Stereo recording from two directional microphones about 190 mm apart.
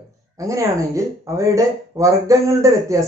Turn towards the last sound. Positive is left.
turn(degrees=-15)  # may be behind; listen again after turning